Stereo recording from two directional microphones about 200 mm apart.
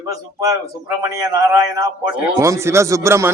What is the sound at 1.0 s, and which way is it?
A man's voice, 15° right (ahead or behind).